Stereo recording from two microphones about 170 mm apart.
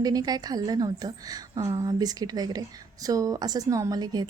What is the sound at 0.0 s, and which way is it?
A woman's voice, 20° right (ahead or behind).